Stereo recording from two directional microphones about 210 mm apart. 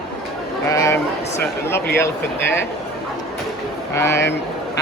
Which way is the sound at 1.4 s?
10° left (ahead or behind).